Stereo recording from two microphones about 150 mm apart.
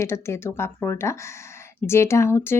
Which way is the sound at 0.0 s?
15° left (ahead or behind).